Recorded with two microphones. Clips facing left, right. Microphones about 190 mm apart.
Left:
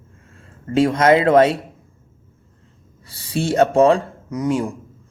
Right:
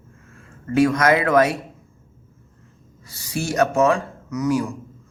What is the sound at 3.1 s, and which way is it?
Speech, 30° left (ahead or behind).